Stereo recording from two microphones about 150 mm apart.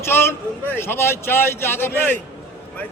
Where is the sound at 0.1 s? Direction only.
15° left (ahead or behind).